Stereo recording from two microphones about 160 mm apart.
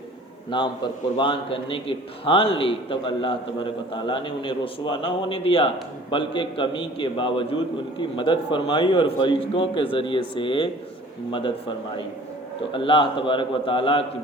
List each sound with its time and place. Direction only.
0.5 s a man's voice: 30° left (ahead or behind)
12.7 s a man's voice: 30° left (ahead or behind)